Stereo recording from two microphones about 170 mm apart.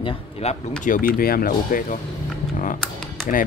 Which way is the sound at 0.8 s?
55° left (ahead or behind).